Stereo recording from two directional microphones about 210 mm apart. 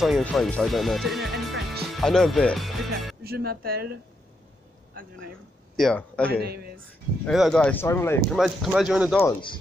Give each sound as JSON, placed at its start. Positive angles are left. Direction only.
{"t": 0.0, "sound": "speech", "side_deg": 0}
{"t": 3.3, "sound": "speech", "side_deg": -45}
{"t": 5.8, "sound": "speech", "side_deg": 5}
{"t": 6.3, "sound": "speech", "side_deg": -50}
{"t": 7.2, "sound": "speech", "side_deg": 0}
{"t": 8.4, "sound": "speech", "side_deg": 0}